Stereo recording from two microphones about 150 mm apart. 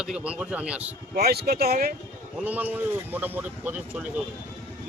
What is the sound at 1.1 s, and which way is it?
Speech, 90° right.